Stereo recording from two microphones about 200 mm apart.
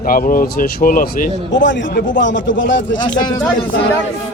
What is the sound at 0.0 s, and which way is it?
Speech, 45° left (ahead or behind).